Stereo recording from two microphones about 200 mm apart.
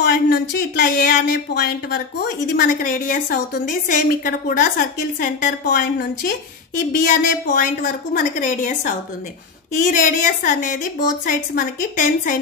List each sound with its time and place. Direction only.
0.0 s speech: 55° left (ahead or behind)
2.6 s a woman's voice: 45° left (ahead or behind)